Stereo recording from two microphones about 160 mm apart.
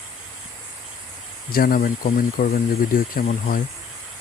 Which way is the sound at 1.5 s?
65° left (ahead or behind).